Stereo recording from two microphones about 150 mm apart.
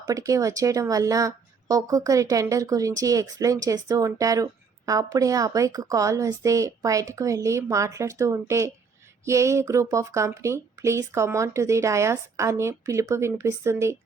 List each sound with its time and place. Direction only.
0.1 s speech: 20° right (ahead or behind)